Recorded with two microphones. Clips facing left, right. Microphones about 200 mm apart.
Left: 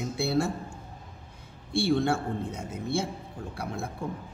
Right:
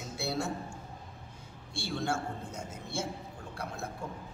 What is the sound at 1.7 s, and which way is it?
A man's voice, 60° left (ahead or behind).